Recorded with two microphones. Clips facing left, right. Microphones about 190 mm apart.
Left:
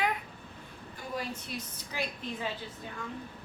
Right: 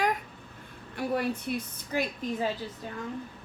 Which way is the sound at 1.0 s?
65° right (ahead or behind).